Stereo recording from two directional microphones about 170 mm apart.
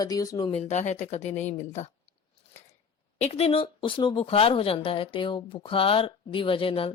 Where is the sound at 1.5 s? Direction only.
40° left (ahead or behind).